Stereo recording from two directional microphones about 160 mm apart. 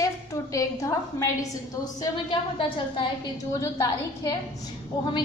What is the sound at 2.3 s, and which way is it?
Speech, 30° left (ahead or behind).